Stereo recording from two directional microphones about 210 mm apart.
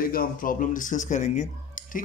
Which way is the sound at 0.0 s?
45° left (ahead or behind).